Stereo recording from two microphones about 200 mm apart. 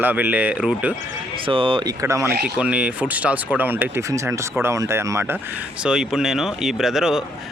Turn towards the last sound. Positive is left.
turn(degrees=0)  # may be behind; listen again after turning